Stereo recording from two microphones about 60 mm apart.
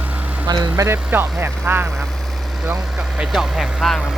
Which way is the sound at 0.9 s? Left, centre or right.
Right.